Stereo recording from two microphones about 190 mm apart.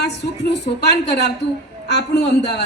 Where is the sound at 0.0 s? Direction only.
60° left (ahead or behind).